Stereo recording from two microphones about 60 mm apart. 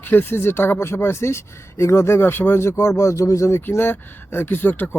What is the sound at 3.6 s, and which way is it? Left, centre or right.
Speech, left.